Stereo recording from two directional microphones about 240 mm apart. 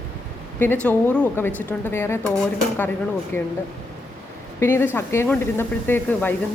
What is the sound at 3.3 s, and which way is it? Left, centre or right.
Speech, centre.